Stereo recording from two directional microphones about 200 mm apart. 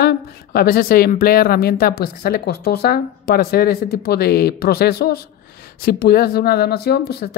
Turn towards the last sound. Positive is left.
turn(degrees=50)  # may be behind; listen again after turning